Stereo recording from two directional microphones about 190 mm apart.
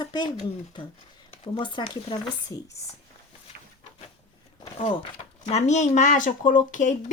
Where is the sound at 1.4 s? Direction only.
25° left (ahead or behind).